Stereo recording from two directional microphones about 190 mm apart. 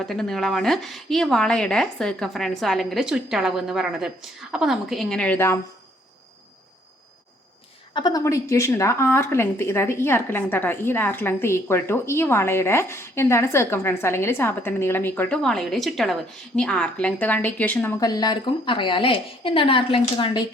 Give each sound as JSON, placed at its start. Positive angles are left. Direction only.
{"t": 0.0, "sound": "a woman's voice", "side_deg": 0}
{"t": 7.9, "sound": "a woman's voice", "side_deg": 20}